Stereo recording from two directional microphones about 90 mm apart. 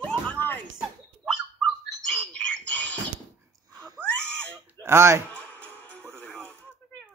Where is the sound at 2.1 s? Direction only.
10° left (ahead or behind).